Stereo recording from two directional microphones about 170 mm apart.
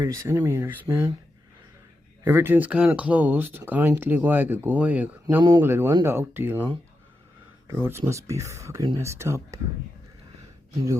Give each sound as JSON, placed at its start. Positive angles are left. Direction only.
{"t": 0.0, "sound": "speech", "side_deg": -20}
{"t": 2.2, "sound": "speech", "side_deg": -10}
{"t": 7.7, "sound": "speech", "side_deg": -15}